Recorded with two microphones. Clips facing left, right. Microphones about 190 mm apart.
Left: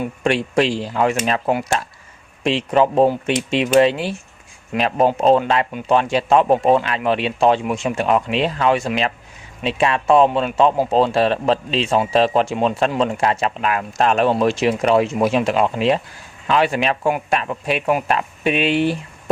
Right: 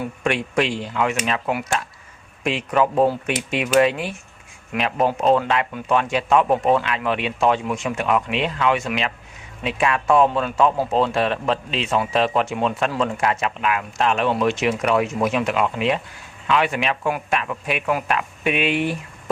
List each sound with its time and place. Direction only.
0.3 s a man's voice: 30° left (ahead or behind)